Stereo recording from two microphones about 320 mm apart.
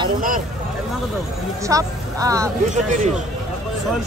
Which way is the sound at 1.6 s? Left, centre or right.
Centre.